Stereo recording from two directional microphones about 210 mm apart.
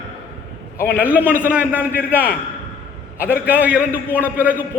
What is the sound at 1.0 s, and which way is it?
Speech, 10° right (ahead or behind).